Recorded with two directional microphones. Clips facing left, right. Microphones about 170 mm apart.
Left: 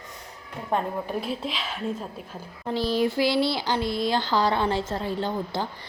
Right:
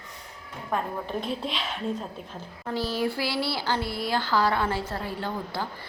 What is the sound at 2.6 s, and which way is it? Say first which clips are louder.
Speech: left 4 dB; 15° left (ahead or behind).